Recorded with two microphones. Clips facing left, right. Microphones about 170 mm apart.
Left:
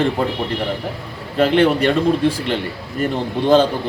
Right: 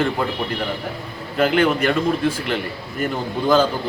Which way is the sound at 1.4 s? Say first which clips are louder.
Left 3 dB; 30° left (ahead or behind).